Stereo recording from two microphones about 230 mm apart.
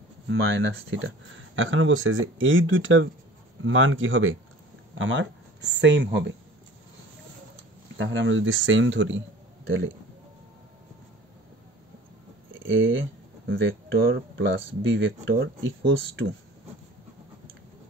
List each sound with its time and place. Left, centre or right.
0.3 s speech: right
8.0 s speech: right
12.4 s a sound: right
13.5 s speech: right